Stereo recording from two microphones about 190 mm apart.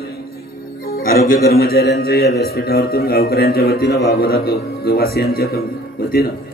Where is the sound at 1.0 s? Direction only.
50° left (ahead or behind).